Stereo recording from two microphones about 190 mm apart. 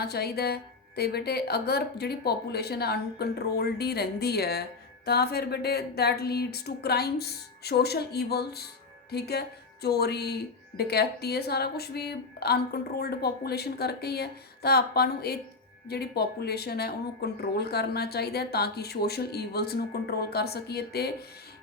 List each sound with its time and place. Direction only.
0.0 s a woman's voice: 55° left (ahead or behind)